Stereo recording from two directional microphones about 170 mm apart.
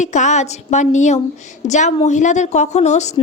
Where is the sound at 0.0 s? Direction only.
45° left (ahead or behind).